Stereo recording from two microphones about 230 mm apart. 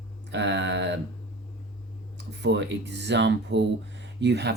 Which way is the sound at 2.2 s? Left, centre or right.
Right.